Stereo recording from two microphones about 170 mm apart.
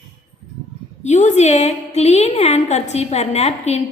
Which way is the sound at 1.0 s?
45° left (ahead or behind).